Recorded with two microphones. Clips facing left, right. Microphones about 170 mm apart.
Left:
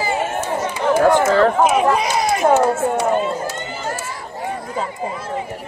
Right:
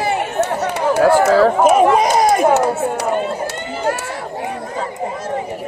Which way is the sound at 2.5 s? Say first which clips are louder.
Even; 70° right (ahead or behind).